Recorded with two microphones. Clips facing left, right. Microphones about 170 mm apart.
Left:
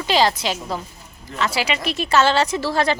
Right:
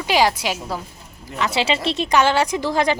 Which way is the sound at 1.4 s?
20° right (ahead or behind).